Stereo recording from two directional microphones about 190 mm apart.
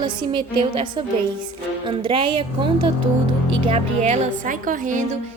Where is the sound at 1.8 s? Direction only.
25° right (ahead or behind); by 5.0 s 45° right (ahead or behind).